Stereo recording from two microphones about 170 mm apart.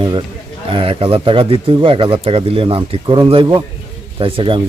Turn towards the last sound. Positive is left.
turn(degrees=-30)  # may be behind; listen again after turning